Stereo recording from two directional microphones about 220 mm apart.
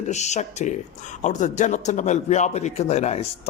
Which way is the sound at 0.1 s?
30° left (ahead or behind).